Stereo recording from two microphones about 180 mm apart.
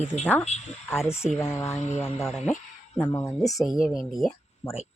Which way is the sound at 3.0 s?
10° left (ahead or behind).